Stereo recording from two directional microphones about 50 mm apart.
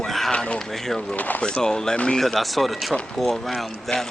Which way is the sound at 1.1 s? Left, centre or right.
Left.